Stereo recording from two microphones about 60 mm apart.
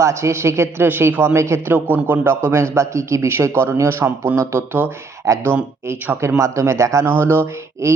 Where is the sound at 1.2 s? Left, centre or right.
Right.